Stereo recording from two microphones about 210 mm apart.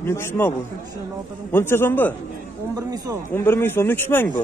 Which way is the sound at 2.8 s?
15° right (ahead or behind).